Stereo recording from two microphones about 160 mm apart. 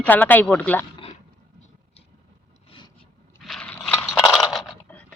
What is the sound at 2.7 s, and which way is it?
Vehicle, 30° left (ahead or behind).